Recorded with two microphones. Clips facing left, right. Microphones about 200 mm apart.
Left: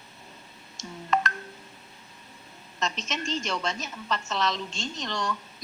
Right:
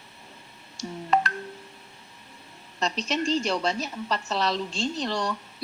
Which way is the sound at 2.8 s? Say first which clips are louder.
Right 5 dB; 35° right (ahead or behind).